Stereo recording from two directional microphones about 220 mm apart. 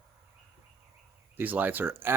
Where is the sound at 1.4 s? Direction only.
10° right (ahead or behind).